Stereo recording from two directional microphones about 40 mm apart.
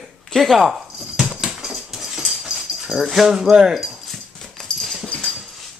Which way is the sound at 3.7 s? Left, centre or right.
Centre.